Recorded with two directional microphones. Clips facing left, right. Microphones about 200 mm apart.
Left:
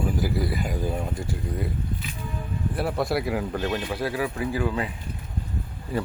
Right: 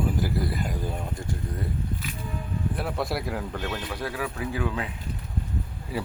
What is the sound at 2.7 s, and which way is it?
Speech, centre (ahead or behind).